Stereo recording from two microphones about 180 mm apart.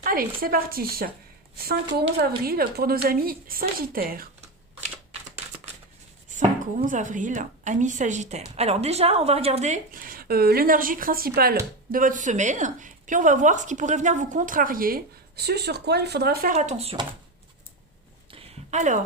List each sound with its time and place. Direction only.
0.0 s speech: 55° right (ahead or behind)
6.7 s a woman's voice: 45° right (ahead or behind); by 16.5 s 60° right (ahead or behind)
16.5 s speech: 40° right (ahead or behind)
18.3 s a sound: 35° right (ahead or behind)